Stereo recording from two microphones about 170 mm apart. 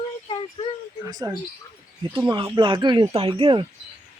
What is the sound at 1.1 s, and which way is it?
Speech, 20° right (ahead or behind).